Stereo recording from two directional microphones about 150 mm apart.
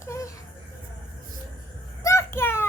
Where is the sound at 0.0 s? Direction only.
20° left (ahead or behind).